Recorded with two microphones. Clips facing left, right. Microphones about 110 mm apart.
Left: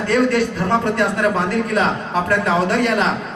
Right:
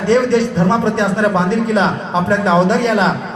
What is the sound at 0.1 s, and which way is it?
A man's voice, 25° right (ahead or behind).